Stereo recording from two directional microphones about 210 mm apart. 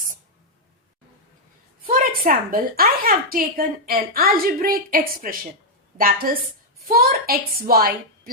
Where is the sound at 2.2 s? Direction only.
40° right (ahead or behind).